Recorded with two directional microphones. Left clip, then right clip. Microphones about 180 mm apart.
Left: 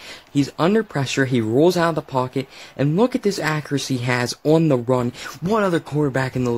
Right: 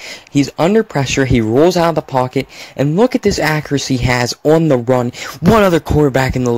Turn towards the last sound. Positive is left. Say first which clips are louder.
# right 8 dB
turn(degrees=-40)  # may be behind; listen again after turning